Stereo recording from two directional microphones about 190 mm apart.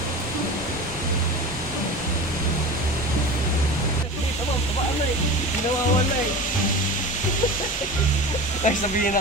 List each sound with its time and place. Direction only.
8.6 s speech: 45° left (ahead or behind)